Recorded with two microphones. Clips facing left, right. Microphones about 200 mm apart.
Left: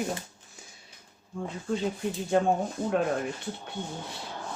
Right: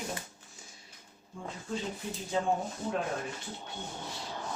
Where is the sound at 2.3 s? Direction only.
65° left (ahead or behind).